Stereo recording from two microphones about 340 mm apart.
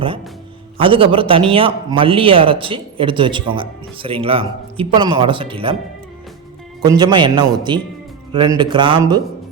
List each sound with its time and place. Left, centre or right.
0.8 s a man's voice: centre
6.8 s a man's voice: centre